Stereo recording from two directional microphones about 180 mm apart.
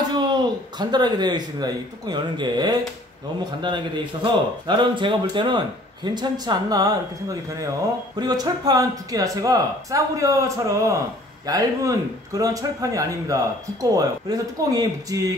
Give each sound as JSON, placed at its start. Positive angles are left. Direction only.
{"t": 0.1, "sound": "a man's voice", "side_deg": -25}
{"t": 8.2, "sound": "a man's voice", "side_deg": -20}